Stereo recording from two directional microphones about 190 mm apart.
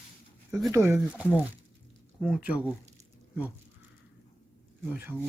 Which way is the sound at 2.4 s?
5° right (ahead or behind).